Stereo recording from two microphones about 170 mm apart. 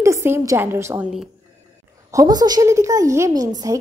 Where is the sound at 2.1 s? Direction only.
20° right (ahead or behind).